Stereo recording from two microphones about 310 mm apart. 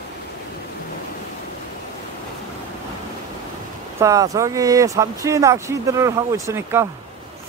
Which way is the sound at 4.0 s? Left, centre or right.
Centre.